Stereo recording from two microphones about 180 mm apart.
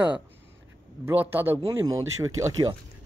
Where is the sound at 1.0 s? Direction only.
10° right (ahead or behind).